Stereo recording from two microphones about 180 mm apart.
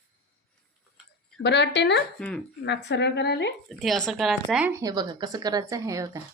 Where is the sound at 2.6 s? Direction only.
75° left (ahead or behind).